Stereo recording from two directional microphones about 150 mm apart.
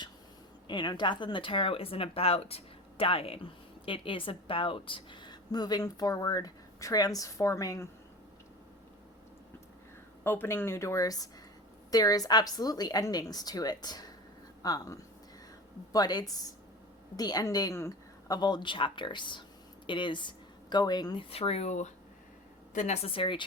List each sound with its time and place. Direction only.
0.7 s a woman's voice: 30° left (ahead or behind)
10.2 s a woman's voice: 15° left (ahead or behind); by 23.4 s 35° left (ahead or behind)